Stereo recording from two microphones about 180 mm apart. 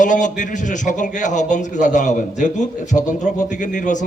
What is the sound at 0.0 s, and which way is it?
A man's voice, 45° left (ahead or behind).